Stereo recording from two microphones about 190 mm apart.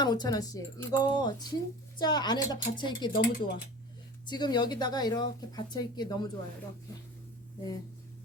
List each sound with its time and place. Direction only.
0.0 s speech: 20° left (ahead or behind)
3.1 s speech: 50° left (ahead or behind)
4.3 s speech: 25° left (ahead or behind)